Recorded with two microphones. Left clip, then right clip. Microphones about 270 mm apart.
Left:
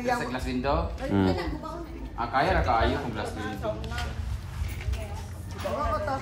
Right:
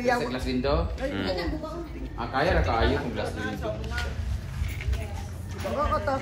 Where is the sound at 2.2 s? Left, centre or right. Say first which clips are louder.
Left 1 dB; centre.